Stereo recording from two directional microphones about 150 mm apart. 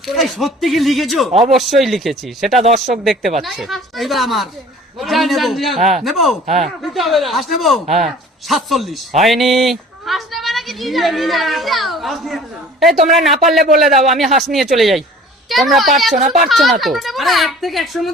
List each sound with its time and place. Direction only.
0.0 s a man's voice: centre (ahead or behind)
2.6 s speech: 50° right (ahead or behind)
2.9 s a man's voice: centre (ahead or behind)
16.1 s a child's voice: 60° right (ahead or behind)
16.4 s a man's voice: centre (ahead or behind)